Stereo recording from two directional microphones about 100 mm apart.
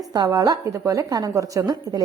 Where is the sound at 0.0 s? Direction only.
40° right (ahead or behind).